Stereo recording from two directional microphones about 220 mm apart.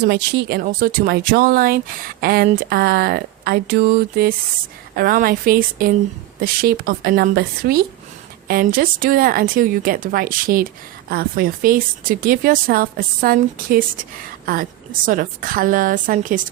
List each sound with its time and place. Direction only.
0.0 s a woman's voice: 50° right (ahead or behind)